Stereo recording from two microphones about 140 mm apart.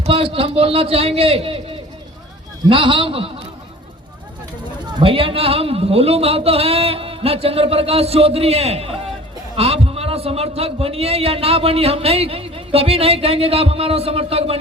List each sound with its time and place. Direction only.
0.0 s speech: 40° right (ahead or behind)
2.6 s a man's voice: 40° right (ahead or behind)
4.9 s speech: 40° right (ahead or behind)